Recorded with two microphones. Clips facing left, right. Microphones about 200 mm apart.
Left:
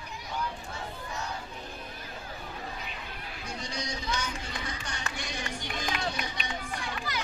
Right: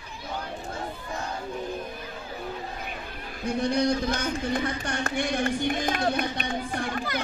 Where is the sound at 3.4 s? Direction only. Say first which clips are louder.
Right 15 dB; 55° right (ahead or behind).